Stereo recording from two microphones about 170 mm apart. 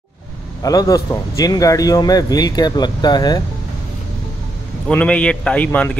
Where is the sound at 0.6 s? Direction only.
20° left (ahead or behind).